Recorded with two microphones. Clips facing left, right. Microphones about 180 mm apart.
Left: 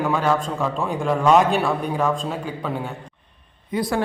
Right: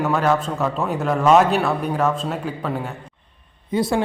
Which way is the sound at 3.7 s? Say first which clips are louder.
Right 3 dB; 25° right (ahead or behind).